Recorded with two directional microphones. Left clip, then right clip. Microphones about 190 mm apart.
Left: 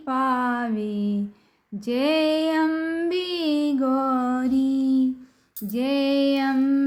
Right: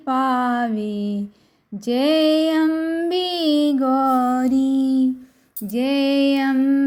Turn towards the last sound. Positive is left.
turn(degrees=-10)  # may be behind; listen again after turning